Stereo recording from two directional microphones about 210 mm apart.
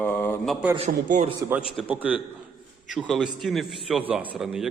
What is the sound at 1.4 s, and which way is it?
A man's voice, 5° right (ahead or behind).